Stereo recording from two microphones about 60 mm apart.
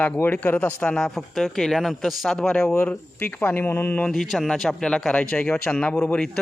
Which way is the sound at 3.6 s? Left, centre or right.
Left.